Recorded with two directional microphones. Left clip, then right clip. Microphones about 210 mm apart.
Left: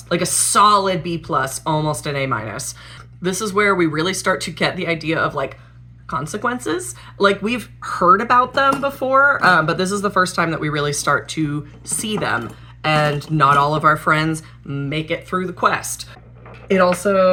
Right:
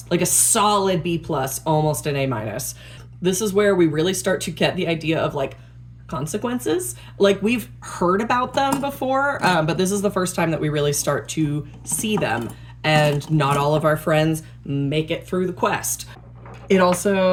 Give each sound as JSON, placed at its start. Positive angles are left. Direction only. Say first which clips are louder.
{"t": 0.3, "sound": "speech", "louder": "left 6 dB", "side_deg": 0}
{"t": 13.1, "sound": "speech", "louder": "even", "side_deg": 20}
{"t": 13.3, "sound": "speech", "louder": "left 9 dB", "side_deg": -5}